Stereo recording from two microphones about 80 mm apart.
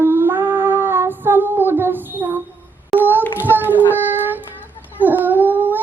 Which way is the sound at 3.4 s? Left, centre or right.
Right.